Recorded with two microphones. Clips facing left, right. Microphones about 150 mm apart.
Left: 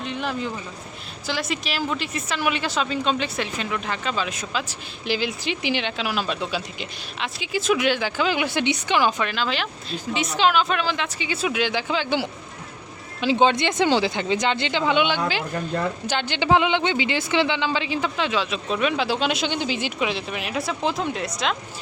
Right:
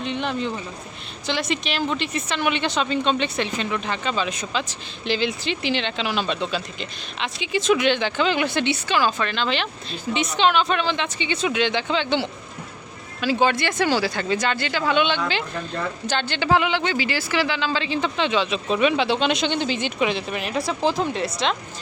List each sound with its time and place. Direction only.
0.0 s speech: 5° left (ahead or behind)
13.2 s speech: 20° left (ahead or behind); by 21.5 s centre (ahead or behind)